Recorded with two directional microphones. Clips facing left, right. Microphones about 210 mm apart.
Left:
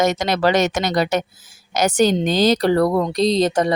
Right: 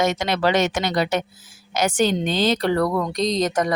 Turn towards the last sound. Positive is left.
turn(degrees=30)  # may be behind; listen again after turning